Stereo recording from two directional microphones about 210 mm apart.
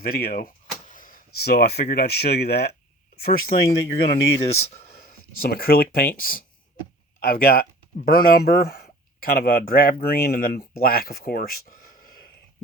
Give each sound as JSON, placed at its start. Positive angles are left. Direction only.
{"t": 0.0, "sound": "speech", "side_deg": 45}
{"t": 4.4, "sound": "speech", "side_deg": 30}
{"t": 4.9, "sound": "a sound", "side_deg": 45}
{"t": 5.4, "sound": "speech", "side_deg": 45}